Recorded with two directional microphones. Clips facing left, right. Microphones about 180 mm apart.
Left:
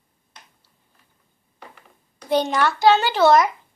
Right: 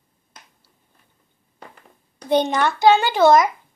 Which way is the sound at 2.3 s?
20° right (ahead or behind).